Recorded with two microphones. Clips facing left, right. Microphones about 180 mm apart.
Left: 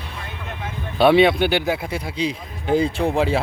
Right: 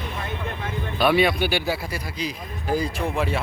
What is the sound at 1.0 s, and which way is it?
Speech, 25° left (ahead or behind).